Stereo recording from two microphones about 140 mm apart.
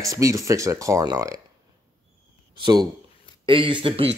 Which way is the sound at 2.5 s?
30° right (ahead or behind).